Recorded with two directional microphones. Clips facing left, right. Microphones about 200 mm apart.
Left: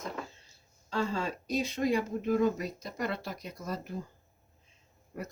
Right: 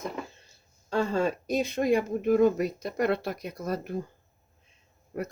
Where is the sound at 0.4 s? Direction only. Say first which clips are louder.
Right 4 dB; 50° right (ahead or behind).